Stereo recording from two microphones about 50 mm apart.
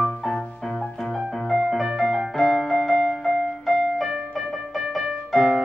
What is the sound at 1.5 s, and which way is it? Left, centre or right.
Music, centre.